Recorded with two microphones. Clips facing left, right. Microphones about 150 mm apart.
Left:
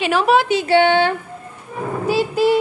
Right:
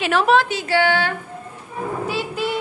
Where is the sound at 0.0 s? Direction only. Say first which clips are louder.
Left 1 dB; centre (ahead or behind).